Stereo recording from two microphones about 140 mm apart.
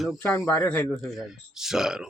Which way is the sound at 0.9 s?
Centre (ahead or behind).